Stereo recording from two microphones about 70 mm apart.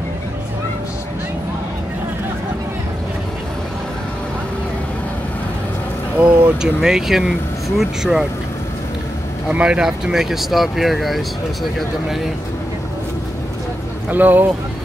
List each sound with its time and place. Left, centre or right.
6.1 s vehicle: right
6.6 s speech: centre
9.5 s speech: centre
14.1 s speech: right